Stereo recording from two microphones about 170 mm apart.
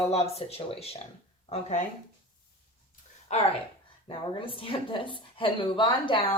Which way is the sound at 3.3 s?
40° left (ahead or behind).